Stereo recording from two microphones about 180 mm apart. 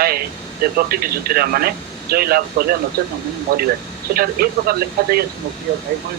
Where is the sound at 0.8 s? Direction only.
60° right (ahead or behind).